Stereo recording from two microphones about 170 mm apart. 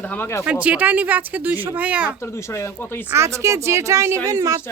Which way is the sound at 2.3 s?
15° left (ahead or behind).